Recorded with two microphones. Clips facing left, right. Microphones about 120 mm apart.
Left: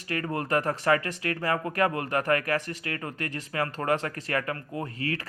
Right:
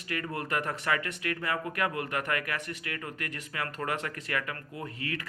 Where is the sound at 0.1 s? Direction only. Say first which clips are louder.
Left 5 dB; 35° left (ahead or behind).